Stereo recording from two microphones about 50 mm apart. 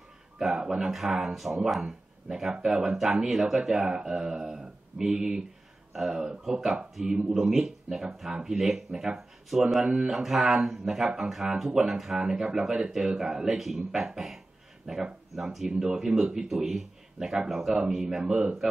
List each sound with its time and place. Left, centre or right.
0.4 s speech: centre
10.0 s a sound: centre
10.5 s speech: centre
18.2 s speech: right